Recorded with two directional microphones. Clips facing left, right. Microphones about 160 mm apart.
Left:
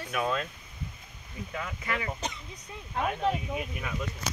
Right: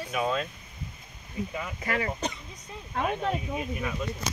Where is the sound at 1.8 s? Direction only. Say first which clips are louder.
Right 5 dB; 45° right (ahead or behind).